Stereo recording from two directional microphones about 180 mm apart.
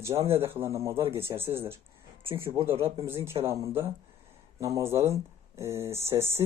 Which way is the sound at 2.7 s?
30° right (ahead or behind).